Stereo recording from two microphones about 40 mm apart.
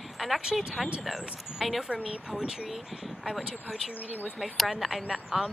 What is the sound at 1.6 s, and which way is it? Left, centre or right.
Speech, centre.